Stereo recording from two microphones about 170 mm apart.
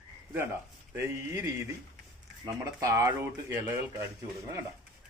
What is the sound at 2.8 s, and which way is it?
Speech, 20° right (ahead or behind).